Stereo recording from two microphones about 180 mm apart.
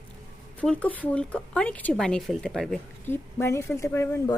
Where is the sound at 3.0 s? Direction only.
15° left (ahead or behind).